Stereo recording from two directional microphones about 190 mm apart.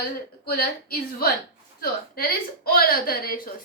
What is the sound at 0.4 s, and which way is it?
Speech, 55° left (ahead or behind).